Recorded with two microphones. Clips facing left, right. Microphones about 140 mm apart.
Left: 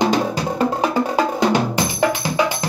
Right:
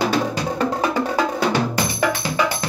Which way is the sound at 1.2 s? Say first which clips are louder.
Left 3 dB; 15° left (ahead or behind).